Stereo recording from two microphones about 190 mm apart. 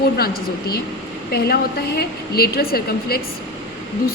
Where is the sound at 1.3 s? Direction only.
55° left (ahead or behind).